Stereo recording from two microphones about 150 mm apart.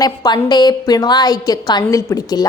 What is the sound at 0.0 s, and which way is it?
A woman's voice, 25° left (ahead or behind).